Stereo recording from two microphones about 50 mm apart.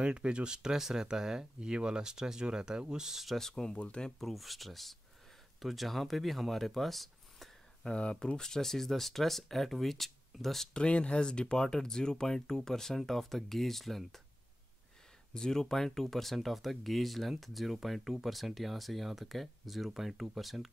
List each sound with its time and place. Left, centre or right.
0.0 s speech: right
3.3 s speech: centre
4.2 s speech: centre
7.8 s speech: centre
8.4 s speech: centre
10.7 s speech: left; by 14.2 s centre
15.3 s speech: centre